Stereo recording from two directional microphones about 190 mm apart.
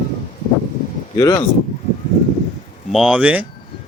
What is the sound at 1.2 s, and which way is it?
Speech, 20° left (ahead or behind).